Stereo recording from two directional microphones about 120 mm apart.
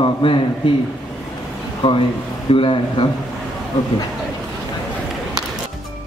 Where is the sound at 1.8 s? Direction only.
45° left (ahead or behind).